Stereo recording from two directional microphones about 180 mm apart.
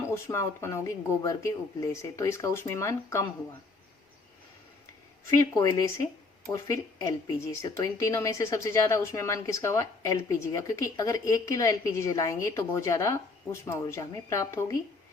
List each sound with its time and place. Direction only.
0.0 s speech: 15° left (ahead or behind)
5.4 s speech: 20° left (ahead or behind)